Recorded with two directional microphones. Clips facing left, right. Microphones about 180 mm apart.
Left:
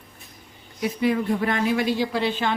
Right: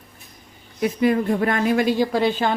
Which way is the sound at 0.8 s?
50° right (ahead or behind).